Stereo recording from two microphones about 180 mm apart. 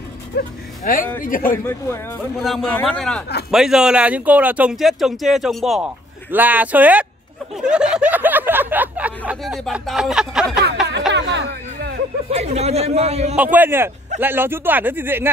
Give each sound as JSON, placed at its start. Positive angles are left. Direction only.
{"t": 0.3, "sound": "speech", "side_deg": 65}
{"t": 0.8, "sound": "speech", "side_deg": 50}
{"t": 2.3, "sound": "speech", "side_deg": 0}
{"t": 10.9, "sound": "a sound", "side_deg": -75}
{"t": 12.3, "sound": "speech", "side_deg": -35}
{"t": 13.4, "sound": "speech", "side_deg": -10}